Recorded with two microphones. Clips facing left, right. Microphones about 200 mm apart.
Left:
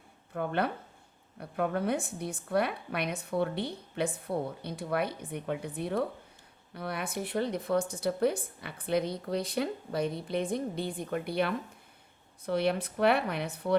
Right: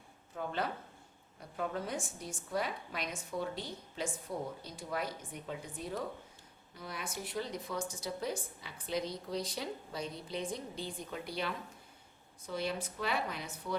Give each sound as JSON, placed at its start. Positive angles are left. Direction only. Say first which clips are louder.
{"t": 0.3, "sound": "a woman's voice", "louder": "left 6 dB", "side_deg": 60}